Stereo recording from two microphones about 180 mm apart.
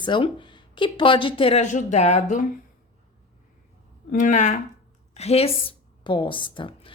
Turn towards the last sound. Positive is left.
turn(degrees=30)  # may be behind; listen again after turning